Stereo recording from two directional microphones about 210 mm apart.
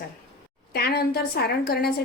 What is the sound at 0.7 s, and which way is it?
A woman's voice, 50° left (ahead or behind).